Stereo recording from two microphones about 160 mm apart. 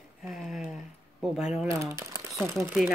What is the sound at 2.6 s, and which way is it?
Speech, 10° right (ahead or behind).